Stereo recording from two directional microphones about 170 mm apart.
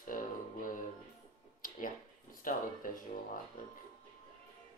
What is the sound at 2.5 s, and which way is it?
Speech, 50° left (ahead or behind).